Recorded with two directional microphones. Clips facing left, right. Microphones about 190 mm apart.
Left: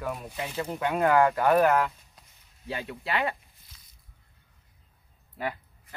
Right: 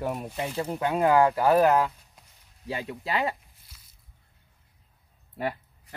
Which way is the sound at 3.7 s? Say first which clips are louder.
Even; 10° right (ahead or behind).